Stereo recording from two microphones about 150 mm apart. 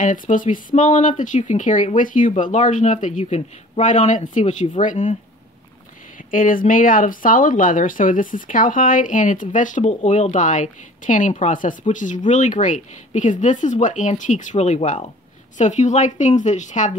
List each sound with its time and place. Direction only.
0.0 s speech: 60° left (ahead or behind)
6.3 s speech: 65° left (ahead or behind)